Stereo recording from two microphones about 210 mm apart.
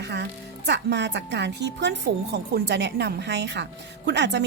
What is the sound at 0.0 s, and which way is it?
A woman's voice, 55° right (ahead or behind).